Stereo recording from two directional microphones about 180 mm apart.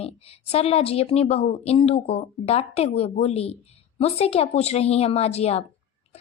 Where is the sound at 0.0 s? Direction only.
35° left (ahead or behind).